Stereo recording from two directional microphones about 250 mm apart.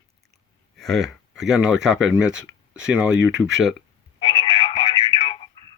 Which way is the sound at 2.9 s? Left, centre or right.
Centre.